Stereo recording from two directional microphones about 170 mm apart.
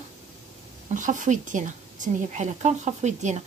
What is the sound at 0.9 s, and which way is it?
A woman's voice, 50° right (ahead or behind).